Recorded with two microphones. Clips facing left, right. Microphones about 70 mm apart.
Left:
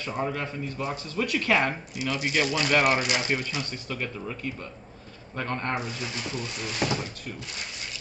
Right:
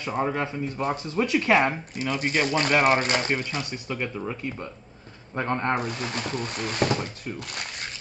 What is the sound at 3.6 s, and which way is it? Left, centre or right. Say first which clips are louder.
Speech: right 2 dB; centre.